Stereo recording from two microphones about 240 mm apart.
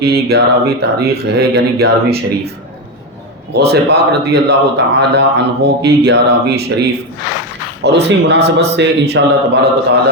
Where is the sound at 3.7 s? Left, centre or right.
Right.